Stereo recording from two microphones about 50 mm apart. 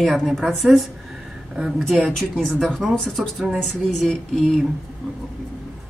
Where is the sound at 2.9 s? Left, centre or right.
Centre.